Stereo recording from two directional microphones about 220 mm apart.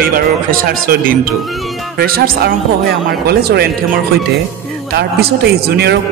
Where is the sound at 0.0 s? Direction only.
40° right (ahead or behind).